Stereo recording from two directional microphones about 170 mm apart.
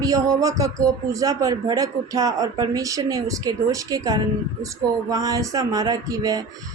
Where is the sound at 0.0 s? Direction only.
20° right (ahead or behind).